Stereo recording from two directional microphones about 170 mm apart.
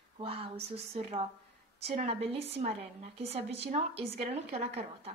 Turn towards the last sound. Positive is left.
turn(degrees=-40)  # may be behind; listen again after turning